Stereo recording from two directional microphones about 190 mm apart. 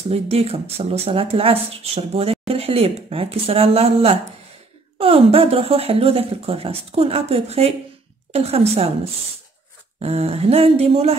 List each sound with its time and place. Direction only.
0.1 s speech: 30° right (ahead or behind)
9.9 s speech: 30° right (ahead or behind)